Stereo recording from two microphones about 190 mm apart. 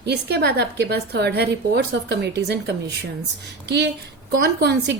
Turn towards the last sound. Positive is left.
turn(degrees=-60)  # may be behind; listen again after turning